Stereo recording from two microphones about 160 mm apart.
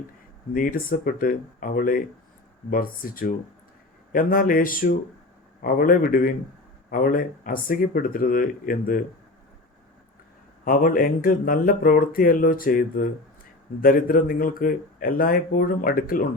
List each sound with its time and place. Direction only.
0.5 s speech: 60° left (ahead or behind)
10.6 s speech: 60° left (ahead or behind)